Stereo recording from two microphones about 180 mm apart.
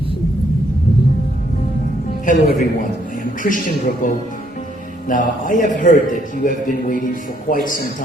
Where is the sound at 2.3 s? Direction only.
45° left (ahead or behind).